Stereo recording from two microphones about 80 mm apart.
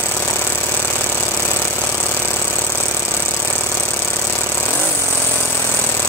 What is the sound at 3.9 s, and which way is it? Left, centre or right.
Vehicle, left.